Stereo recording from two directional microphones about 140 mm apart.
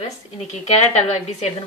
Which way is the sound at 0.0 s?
50° left (ahead or behind).